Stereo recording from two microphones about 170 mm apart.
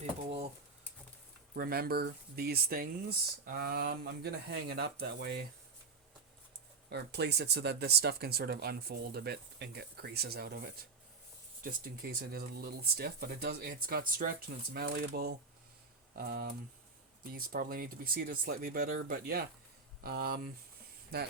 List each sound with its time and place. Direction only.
0.0 s a sound: 35° right (ahead or behind)
1.5 s speech: 60° right (ahead or behind)
6.9 s speech: 80° right